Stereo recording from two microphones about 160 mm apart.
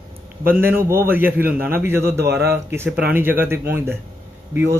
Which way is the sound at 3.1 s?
15° right (ahead or behind).